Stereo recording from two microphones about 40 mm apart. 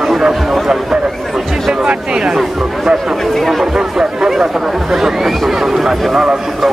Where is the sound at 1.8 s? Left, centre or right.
Right.